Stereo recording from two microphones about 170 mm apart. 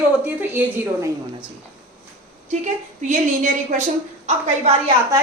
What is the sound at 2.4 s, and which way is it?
A woman's voice, 45° right (ahead or behind).